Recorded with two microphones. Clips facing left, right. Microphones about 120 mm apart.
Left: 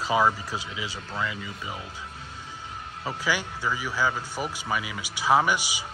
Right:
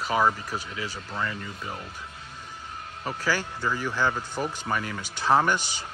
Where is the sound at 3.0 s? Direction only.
15° left (ahead or behind).